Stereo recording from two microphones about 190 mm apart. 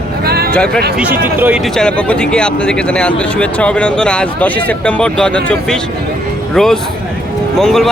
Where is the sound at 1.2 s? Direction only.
10° right (ahead or behind).